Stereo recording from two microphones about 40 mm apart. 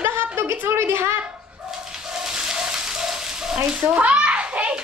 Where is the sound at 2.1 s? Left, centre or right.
Centre.